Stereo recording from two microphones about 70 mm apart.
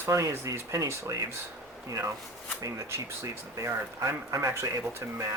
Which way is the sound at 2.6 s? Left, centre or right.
Right.